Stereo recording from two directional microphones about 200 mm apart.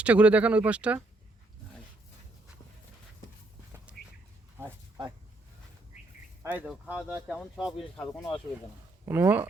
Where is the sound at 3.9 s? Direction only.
5° right (ahead or behind).